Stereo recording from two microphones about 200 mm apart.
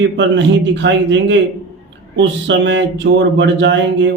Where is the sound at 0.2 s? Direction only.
65° right (ahead or behind).